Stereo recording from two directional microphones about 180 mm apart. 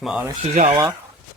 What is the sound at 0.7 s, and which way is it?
Speech, 20° right (ahead or behind).